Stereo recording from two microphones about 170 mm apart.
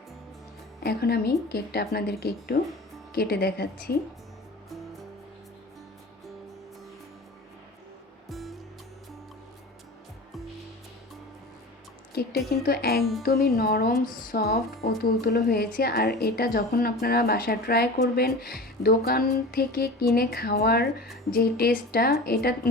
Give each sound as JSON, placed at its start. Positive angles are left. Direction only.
{"t": 0.8, "sound": "a woman's voice", "side_deg": 65}
{"t": 8.3, "sound": "music", "side_deg": 0}
{"t": 12.6, "sound": "speech", "side_deg": 65}
{"t": 13.0, "sound": "speech", "side_deg": 0}
{"t": 13.2, "sound": "speech", "side_deg": 65}